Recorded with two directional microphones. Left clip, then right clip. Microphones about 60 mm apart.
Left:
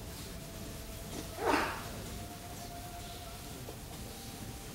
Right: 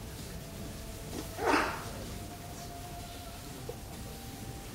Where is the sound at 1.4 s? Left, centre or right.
Right.